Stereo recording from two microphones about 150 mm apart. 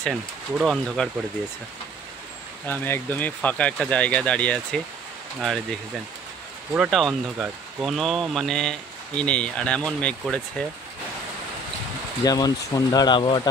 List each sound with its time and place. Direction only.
0.0 s speech: centre (ahead or behind)
2.6 s speech: 10° left (ahead or behind)
6.7 s speech: 5° right (ahead or behind)
12.3 s speech: 25° left (ahead or behind)